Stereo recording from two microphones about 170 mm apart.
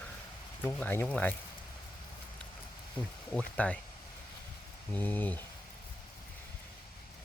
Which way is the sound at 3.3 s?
5° left (ahead or behind).